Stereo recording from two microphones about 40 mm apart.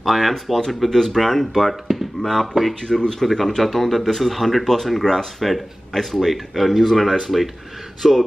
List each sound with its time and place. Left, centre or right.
0.0 s speech: centre
3.3 s speech: centre